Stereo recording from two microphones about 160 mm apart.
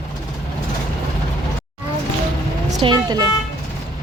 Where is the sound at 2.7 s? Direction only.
25° right (ahead or behind).